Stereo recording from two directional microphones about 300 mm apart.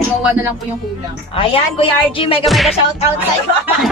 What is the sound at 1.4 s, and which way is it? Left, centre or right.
A woman's voice, centre.